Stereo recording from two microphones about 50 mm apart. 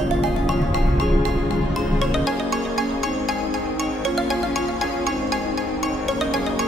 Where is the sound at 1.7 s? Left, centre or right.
Centre.